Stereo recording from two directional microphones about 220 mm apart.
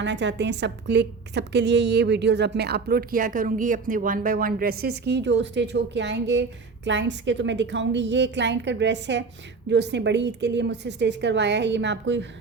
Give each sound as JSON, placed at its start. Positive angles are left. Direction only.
{"t": 0.0, "sound": "a woman's voice", "side_deg": -55}